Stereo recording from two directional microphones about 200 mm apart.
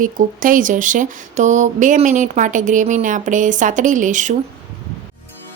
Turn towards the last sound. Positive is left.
turn(degrees=-40)  # may be behind; listen again after turning